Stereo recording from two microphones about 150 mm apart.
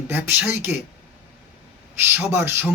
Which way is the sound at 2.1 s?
15° right (ahead or behind).